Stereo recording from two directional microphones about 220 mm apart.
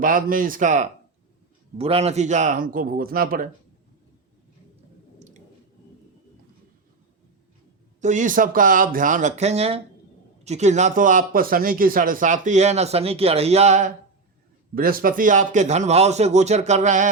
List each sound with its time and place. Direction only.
0.0 s speech: 40° right (ahead or behind)
8.0 s speech: 35° right (ahead or behind)